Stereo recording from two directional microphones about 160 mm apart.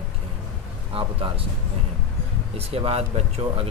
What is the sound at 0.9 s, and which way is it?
Speech, 35° right (ahead or behind).